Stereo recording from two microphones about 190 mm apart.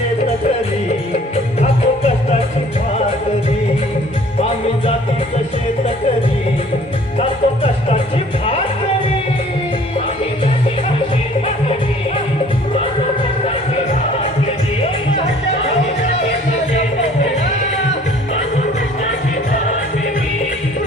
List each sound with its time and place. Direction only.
7.2 s music: 35° left (ahead or behind)